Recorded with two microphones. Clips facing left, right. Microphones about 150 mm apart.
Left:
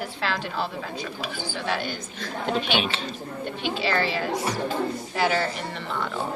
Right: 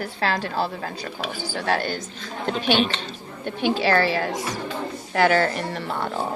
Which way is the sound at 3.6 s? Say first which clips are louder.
Right 6 dB; 50° right (ahead or behind).